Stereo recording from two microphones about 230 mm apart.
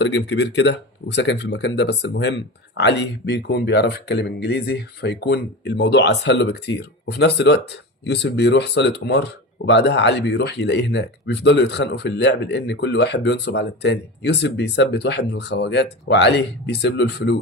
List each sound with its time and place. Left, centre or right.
0.0 s speech: left